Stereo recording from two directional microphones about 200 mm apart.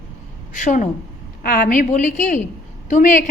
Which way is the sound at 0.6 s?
40° left (ahead or behind).